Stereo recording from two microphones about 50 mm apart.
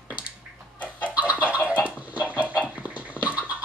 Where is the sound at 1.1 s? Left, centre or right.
Right.